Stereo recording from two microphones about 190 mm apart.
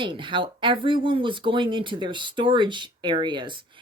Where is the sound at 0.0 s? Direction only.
25° right (ahead or behind).